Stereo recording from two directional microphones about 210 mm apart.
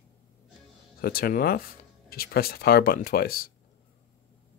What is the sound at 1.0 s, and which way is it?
Speech, 45° left (ahead or behind).